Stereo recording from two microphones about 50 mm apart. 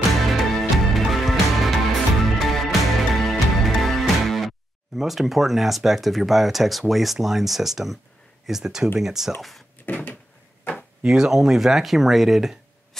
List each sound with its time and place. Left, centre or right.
0.3 s music: centre
8.5 s speech: centre
9.8 s cupboard open or close: left
11.0 s speech: centre